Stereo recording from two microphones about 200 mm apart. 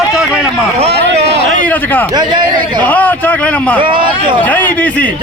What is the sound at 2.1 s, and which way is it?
Speech, 20° right (ahead or behind).